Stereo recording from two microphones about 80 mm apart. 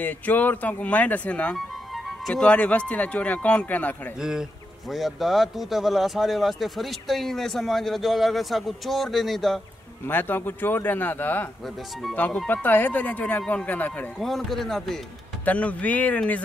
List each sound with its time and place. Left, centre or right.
0.0 s speech: left
1.9 s music: centre
2.4 s a man's voice: centre
4.2 s a man's voice: centre
10.0 s speech: left
12.6 s speech: left
14.1 s a man's voice: centre
15.4 s speech: centre